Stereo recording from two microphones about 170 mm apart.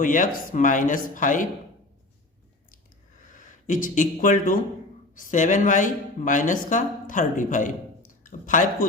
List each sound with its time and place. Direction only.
0.0 s speech: 50° left (ahead or behind)
3.2 s speech: 50° left (ahead or behind)